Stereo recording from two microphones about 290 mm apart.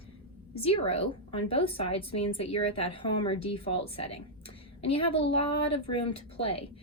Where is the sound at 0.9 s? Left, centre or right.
Centre.